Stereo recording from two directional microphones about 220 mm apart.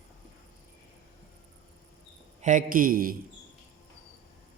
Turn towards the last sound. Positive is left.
turn(degrees=-40)  # may be behind; listen again after turning